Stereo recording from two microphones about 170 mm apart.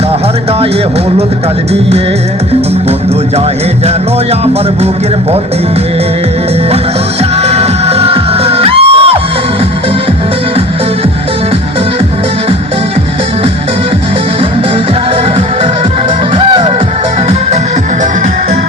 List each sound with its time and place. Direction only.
7.4 s music: 40° right (ahead or behind)
16.3 s music: 30° right (ahead or behind)